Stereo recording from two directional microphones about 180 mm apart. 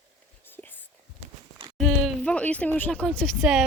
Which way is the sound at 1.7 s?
5° left (ahead or behind).